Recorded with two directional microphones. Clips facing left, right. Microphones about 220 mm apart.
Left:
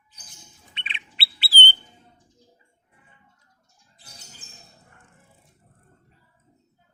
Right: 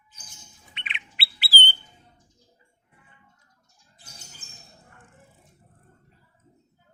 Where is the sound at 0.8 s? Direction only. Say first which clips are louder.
Even; 30° left (ahead or behind).